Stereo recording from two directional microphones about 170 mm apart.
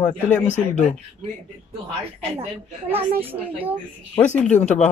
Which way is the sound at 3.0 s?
35° right (ahead or behind).